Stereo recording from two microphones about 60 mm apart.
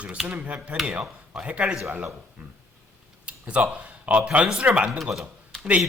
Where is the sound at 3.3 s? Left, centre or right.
Centre.